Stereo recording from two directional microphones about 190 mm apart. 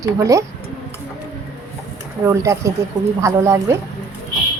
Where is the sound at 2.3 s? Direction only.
15° right (ahead or behind).